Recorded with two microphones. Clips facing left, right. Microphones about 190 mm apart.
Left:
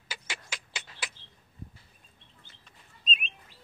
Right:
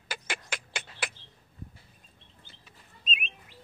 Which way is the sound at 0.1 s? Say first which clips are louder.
Right 5 dB; 55° right (ahead or behind).